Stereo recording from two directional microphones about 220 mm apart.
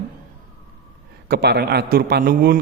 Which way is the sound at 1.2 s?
45° right (ahead or behind).